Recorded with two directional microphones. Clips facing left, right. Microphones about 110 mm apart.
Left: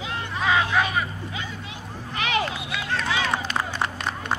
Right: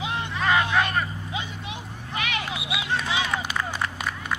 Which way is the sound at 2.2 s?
35° left (ahead or behind).